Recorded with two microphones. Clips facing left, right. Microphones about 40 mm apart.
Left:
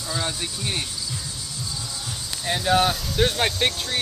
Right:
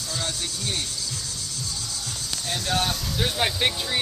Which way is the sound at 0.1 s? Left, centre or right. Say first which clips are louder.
Left 3 dB; left.